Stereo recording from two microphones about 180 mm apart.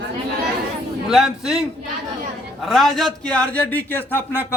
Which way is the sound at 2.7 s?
Centre (ahead or behind).